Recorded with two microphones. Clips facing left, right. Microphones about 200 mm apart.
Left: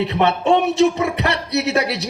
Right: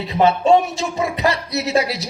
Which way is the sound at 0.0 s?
65° left (ahead or behind).